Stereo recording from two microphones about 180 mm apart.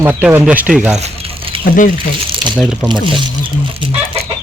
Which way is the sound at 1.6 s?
50° left (ahead or behind).